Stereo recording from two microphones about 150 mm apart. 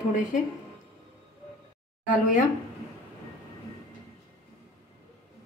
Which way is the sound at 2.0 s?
60° left (ahead or behind).